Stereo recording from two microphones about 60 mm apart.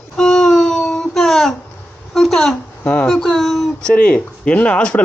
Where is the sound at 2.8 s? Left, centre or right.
Centre.